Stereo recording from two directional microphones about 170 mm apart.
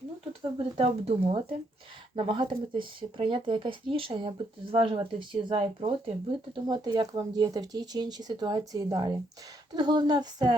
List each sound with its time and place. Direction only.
0.8 s speech: 35° right (ahead or behind)